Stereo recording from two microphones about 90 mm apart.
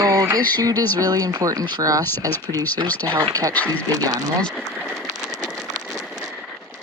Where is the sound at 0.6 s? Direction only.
45° right (ahead or behind).